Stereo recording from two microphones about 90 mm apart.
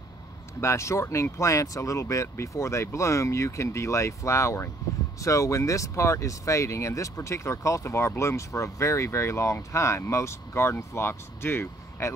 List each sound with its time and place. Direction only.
0.6 s speech: 30° left (ahead or behind)